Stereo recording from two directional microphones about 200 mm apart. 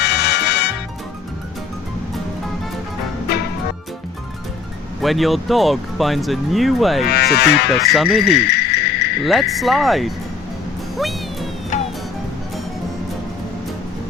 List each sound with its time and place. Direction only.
0.0 s music: 55° left (ahead or behind)
4.9 s speech: centre (ahead or behind)
7.1 s speech: 50° left (ahead or behind)
7.9 s speech: 5° right (ahead or behind)
8.2 s a sound: 55° left (ahead or behind)
9.2 s speech: centre (ahead or behind)
10.9 s music: centre (ahead or behind)
11.7 s music: 40° left (ahead or behind)